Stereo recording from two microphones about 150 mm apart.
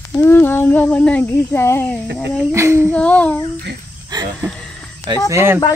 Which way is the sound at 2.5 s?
20° right (ahead or behind).